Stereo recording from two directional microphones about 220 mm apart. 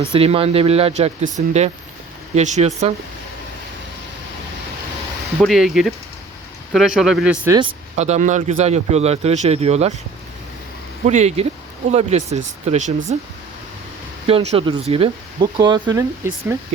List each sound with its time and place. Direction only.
0.0 s speech: 25° right (ahead or behind)
5.4 s speech: centre (ahead or behind)
7.9 s speech: 30° right (ahead or behind)
11.0 s speech: 30° right (ahead or behind)
14.3 s speech: 25° right (ahead or behind)